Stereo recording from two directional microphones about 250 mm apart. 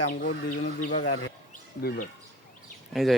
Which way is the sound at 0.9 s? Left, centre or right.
Left.